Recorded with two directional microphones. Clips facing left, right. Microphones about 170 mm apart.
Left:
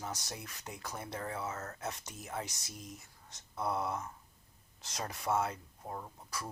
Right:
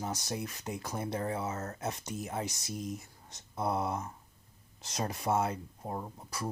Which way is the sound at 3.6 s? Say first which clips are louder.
Right 3 dB; 25° right (ahead or behind).